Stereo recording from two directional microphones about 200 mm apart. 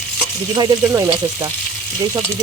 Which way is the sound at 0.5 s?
20° right (ahead or behind).